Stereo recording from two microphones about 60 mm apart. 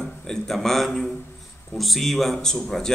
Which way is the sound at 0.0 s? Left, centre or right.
Centre.